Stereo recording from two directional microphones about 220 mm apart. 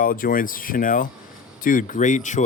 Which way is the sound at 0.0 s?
40° left (ahead or behind).